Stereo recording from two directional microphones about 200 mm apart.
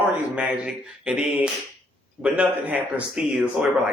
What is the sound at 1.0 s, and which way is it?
A man's voice, 5° right (ahead or behind).